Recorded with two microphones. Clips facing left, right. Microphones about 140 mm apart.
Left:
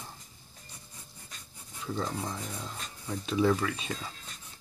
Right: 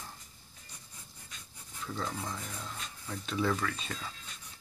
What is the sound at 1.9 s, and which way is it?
Speech, 15° left (ahead or behind).